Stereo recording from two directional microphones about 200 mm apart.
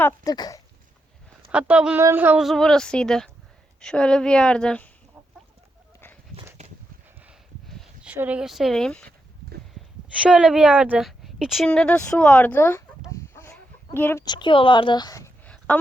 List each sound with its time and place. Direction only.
0.0 s speech: 20° left (ahead or behind)
1.5 s a woman's voice: 5° right (ahead or behind)
7.3 s a sound: centre (ahead or behind)
10.2 s a woman's voice: 5° right (ahead or behind); by 12.8 s 10° left (ahead or behind)
13.1 s chicken: 15° left (ahead or behind)
15.4 s a sound: 5° left (ahead or behind)